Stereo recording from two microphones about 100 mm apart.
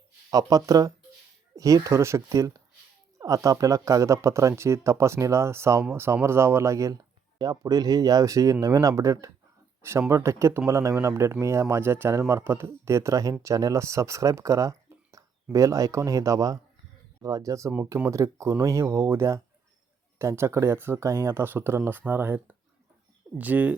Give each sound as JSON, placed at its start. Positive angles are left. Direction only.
{"t": 0.3, "sound": "a man's voice", "side_deg": -40}